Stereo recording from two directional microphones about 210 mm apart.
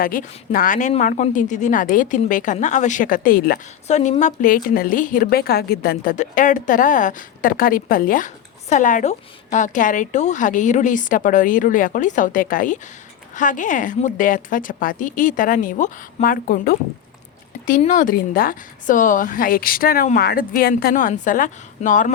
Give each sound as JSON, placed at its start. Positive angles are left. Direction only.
{"t": 0.0, "sound": "a woman's voice", "side_deg": 40}
{"t": 3.8, "sound": "a woman's voice", "side_deg": 35}